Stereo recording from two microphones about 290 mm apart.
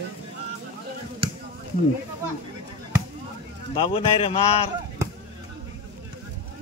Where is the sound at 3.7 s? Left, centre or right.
Centre.